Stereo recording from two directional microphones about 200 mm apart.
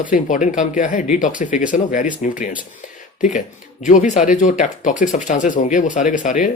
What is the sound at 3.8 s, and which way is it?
Speech, 40° left (ahead or behind).